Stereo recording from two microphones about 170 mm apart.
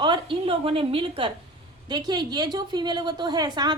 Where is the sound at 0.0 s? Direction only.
30° right (ahead or behind).